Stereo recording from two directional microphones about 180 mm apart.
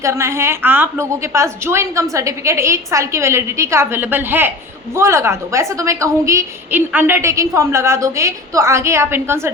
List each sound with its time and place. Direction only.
0.0 s a woman's voice: 15° right (ahead or behind)